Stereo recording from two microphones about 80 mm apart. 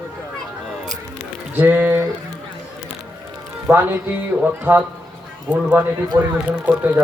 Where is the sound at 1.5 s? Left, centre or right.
Right.